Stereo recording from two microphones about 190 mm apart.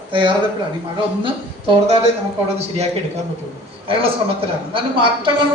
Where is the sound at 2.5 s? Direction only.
35° right (ahead or behind).